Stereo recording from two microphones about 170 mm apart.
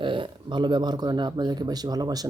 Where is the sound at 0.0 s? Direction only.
30° right (ahead or behind).